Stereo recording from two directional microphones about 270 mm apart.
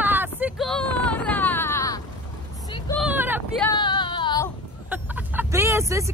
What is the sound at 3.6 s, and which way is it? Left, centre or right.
Female singing, centre.